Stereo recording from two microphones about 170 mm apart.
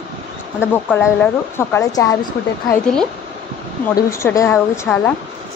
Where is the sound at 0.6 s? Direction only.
10° left (ahead or behind).